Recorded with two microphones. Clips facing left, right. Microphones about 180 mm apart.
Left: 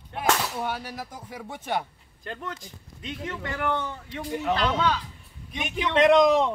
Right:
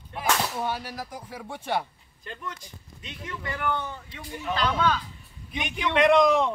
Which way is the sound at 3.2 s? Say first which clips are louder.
Left 1 dB; 45° left (ahead or behind).